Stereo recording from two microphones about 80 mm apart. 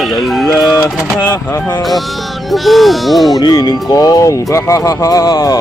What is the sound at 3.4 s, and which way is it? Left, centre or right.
Speech, left.